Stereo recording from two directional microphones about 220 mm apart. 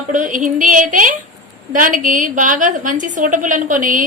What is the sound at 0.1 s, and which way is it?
A woman's voice, 35° right (ahead or behind).